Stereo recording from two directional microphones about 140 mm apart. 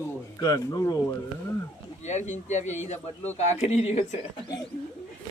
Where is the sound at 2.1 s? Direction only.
60° left (ahead or behind).